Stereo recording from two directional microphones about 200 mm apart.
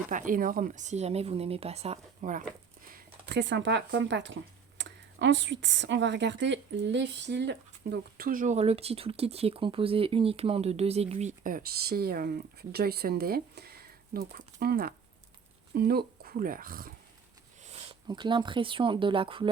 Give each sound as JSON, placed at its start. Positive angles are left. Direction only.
{"t": 0.1, "sound": "speech", "side_deg": -40}
{"t": 2.9, "sound": "speech", "side_deg": -60}
{"t": 18.1, "sound": "speech", "side_deg": -20}